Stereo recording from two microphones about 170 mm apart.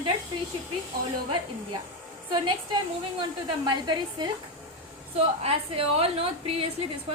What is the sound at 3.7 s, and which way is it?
A woman's voice, 25° right (ahead or behind).